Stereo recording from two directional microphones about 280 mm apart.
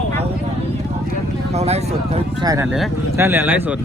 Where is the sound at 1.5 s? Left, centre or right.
Right.